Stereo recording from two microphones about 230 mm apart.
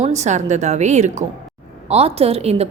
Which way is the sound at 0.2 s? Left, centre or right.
Right.